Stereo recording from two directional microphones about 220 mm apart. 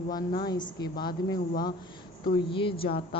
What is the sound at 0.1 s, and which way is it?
Speech, 20° left (ahead or behind).